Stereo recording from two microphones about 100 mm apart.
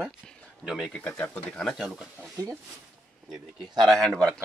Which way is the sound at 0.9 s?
15° left (ahead or behind).